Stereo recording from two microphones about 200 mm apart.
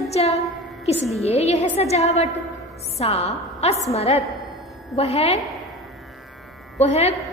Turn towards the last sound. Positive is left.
turn(degrees=30)  # may be behind; listen again after turning